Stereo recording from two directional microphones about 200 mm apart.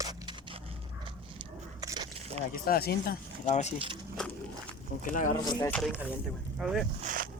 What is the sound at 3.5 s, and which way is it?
Speech, 35° left (ahead or behind).